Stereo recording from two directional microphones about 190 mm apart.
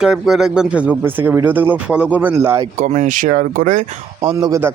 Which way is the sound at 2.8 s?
40° right (ahead or behind).